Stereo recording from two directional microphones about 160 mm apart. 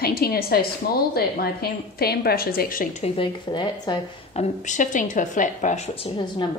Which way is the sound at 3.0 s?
35° left (ahead or behind).